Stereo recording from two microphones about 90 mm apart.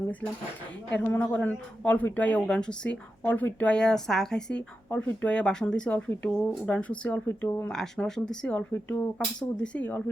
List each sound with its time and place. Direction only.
0.9 s a man's voice: 20° left (ahead or behind)
3.2 s a man's voice: 20° left (ahead or behind)
7.3 s speech: 25° left (ahead or behind)
7.7 s a man's voice: 5° left (ahead or behind)